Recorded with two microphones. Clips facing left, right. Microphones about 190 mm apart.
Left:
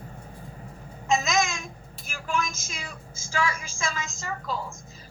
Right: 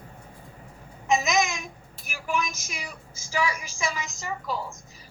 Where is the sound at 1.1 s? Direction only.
15° right (ahead or behind).